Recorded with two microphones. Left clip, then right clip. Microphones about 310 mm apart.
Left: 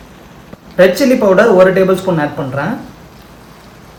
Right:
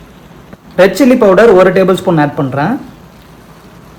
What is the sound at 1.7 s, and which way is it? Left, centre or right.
Speech, centre.